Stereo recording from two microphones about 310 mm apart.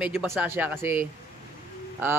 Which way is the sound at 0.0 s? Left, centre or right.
Centre.